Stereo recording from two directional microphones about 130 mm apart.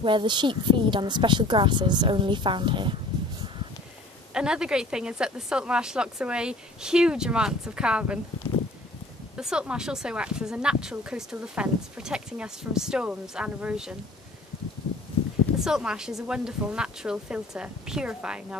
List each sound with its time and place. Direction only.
0.0 s speech: 40° right (ahead or behind)
4.3 s speech: 5° right (ahead or behind)
9.4 s speech: 5° right (ahead or behind)
15.6 s speech: 5° right (ahead or behind)